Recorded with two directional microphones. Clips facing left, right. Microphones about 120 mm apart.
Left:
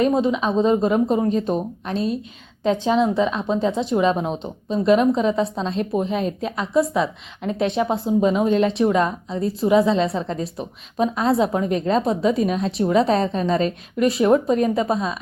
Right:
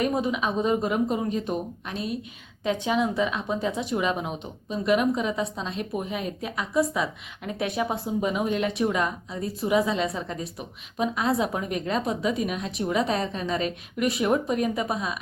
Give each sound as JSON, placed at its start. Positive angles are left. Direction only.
{"t": 0.0, "sound": "a woman's voice", "side_deg": 25}